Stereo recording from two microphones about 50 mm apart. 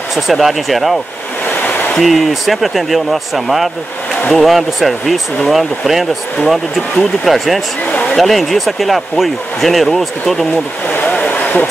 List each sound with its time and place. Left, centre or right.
0.1 s speech: centre
1.4 s a sound: left
2.0 s speech: centre
7.8 s speech: left
8.2 s speech: centre
10.9 s a sound: left